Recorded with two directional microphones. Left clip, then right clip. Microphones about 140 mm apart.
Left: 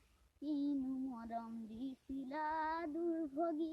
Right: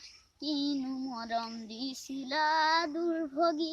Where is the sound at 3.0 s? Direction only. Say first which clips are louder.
Right 9 dB; 25° right (ahead or behind).